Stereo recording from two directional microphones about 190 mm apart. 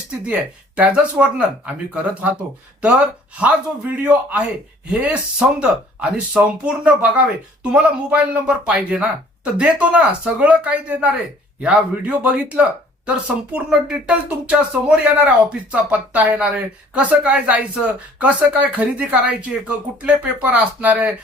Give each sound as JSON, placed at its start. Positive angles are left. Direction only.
{"t": 0.8, "sound": "speech", "side_deg": -5}
{"t": 3.4, "sound": "speech", "side_deg": -10}